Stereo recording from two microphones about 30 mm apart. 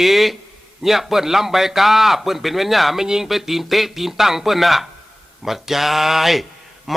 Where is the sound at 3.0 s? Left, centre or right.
Centre.